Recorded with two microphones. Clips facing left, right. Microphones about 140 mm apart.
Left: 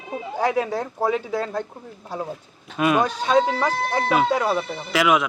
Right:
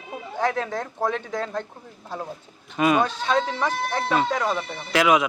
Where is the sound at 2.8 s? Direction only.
Centre (ahead or behind).